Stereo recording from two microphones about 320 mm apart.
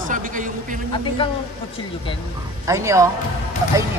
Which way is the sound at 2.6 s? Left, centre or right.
Centre.